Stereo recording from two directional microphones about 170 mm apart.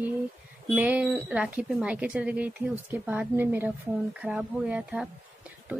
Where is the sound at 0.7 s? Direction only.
10° right (ahead or behind).